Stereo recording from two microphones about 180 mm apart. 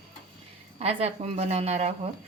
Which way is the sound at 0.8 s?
35° right (ahead or behind).